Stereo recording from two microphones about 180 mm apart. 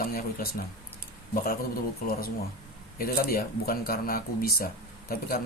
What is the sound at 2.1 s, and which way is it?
Speech, 55° left (ahead or behind).